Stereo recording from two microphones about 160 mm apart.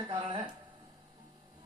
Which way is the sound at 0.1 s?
35° right (ahead or behind).